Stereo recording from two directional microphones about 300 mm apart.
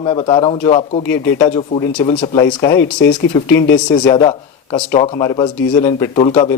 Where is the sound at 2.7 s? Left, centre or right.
Left.